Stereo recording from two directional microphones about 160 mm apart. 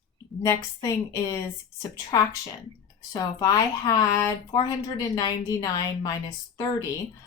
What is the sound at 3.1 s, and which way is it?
Speech, 25° left (ahead or behind).